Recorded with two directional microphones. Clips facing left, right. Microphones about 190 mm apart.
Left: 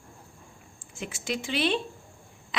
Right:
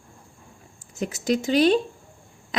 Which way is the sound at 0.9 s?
40° right (ahead or behind).